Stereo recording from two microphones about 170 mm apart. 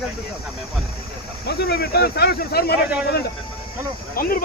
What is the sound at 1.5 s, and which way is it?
Speech, 70° left (ahead or behind).